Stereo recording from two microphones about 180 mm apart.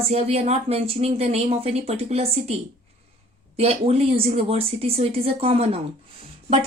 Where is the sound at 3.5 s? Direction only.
35° right (ahead or behind).